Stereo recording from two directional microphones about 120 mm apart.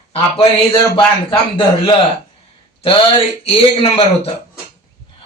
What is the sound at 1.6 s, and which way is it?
A man's voice, 40° left (ahead or behind).